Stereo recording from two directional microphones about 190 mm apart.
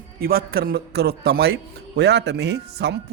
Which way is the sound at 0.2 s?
50° right (ahead or behind).